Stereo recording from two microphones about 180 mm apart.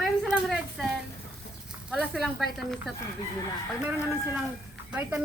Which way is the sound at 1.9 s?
Centre (ahead or behind).